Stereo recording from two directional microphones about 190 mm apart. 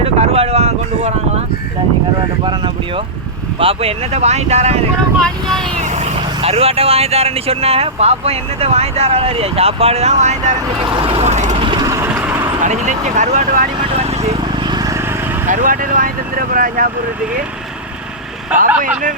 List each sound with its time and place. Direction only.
0.0 s boat: 30° right (ahead or behind)
3.6 s speech: 30° right (ahead or behind)
5.2 s speech: centre (ahead or behind)
5.7 s speech: 35° right (ahead or behind)
10.8 s vehicle: 25° right (ahead or behind)
12.6 s speech: 40° right (ahead or behind)
14.7 s vehicle: 20° right (ahead or behind)
15.4 s speech: 45° right (ahead or behind)